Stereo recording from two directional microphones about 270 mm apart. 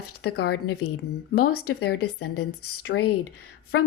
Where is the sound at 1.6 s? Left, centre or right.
Left.